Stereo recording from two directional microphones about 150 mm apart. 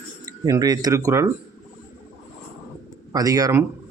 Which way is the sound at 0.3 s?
25° right (ahead or behind).